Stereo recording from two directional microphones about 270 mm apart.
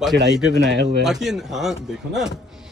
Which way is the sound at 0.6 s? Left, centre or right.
Right.